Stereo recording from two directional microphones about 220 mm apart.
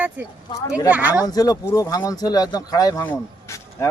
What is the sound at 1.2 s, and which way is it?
Speech, 15° left (ahead or behind).